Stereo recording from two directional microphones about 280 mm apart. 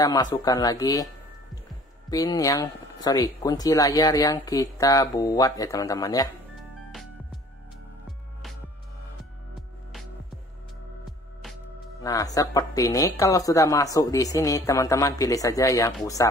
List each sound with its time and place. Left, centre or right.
0.0 s speech: centre
2.0 s speech: centre
12.0 s speech: centre